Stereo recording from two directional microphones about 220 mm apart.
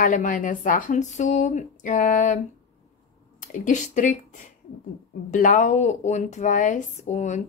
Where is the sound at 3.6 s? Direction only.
35° left (ahead or behind).